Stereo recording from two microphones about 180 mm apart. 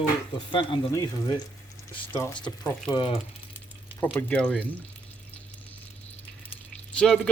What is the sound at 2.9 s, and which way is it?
Speech, 30° left (ahead or behind).